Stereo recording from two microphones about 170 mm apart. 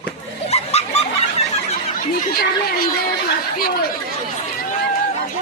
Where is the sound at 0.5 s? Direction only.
40° left (ahead or behind).